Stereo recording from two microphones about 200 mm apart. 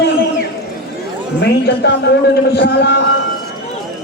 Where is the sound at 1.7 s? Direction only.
60° left (ahead or behind).